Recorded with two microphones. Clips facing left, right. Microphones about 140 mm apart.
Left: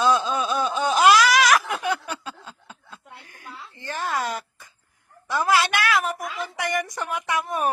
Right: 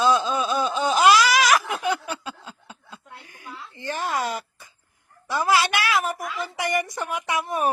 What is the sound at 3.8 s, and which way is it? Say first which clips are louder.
A woman's voice: right 1 dB; 10° right (ahead or behind).